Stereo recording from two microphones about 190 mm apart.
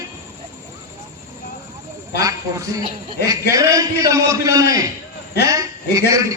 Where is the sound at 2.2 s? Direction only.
20° right (ahead or behind).